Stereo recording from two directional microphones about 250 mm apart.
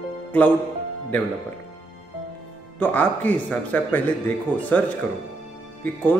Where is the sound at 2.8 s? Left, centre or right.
Centre.